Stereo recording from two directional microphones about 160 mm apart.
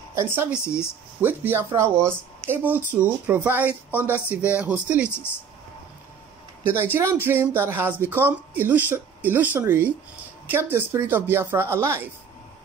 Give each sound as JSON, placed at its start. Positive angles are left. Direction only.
{"t": 0.1, "sound": "speech", "side_deg": -15}
{"t": 6.8, "sound": "speech", "side_deg": -15}